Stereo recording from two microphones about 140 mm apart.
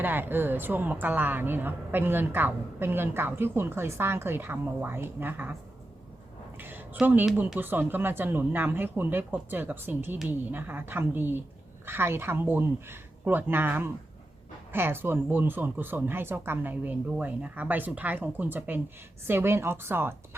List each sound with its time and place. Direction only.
0.0 s speech: 15° right (ahead or behind)
6.6 s a sound: 15° right (ahead or behind)
6.9 s speech: 15° right (ahead or behind)